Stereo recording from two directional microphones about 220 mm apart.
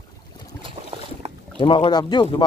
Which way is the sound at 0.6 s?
25° right (ahead or behind).